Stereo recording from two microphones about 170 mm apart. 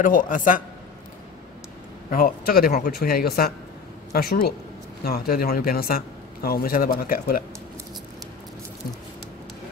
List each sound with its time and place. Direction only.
0.0 s a man's voice: 50° left (ahead or behind)
2.0 s a man's voice: 55° left (ahead or behind)